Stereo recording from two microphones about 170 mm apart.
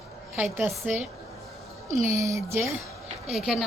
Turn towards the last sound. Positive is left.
turn(degrees=-5)  # may be behind; listen again after turning